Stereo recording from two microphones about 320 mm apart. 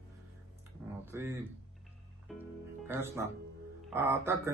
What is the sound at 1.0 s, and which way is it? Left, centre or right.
Speech, centre.